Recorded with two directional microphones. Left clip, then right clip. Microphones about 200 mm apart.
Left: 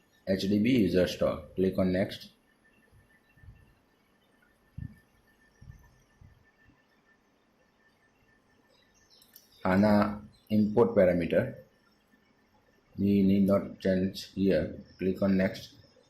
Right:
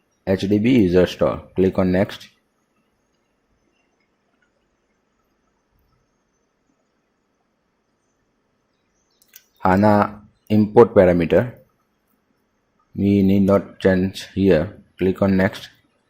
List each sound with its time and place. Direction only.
0.3 s speech: 45° right (ahead or behind)
9.6 s speech: 50° right (ahead or behind)
13.1 s speech: 50° right (ahead or behind)